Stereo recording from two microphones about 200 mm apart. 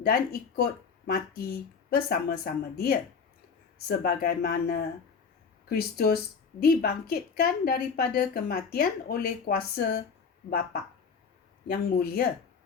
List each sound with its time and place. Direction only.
0.0 s speech: 50° left (ahead or behind)
11.7 s speech: 50° left (ahead or behind)